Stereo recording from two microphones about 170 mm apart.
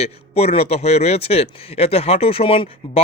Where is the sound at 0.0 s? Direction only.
35° left (ahead or behind).